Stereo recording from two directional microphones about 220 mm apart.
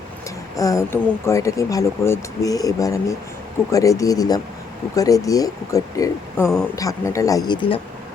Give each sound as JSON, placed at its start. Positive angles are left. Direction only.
{"t": 0.5, "sound": "speech", "side_deg": 15}